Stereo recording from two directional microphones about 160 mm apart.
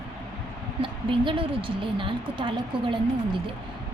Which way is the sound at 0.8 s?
30° right (ahead or behind).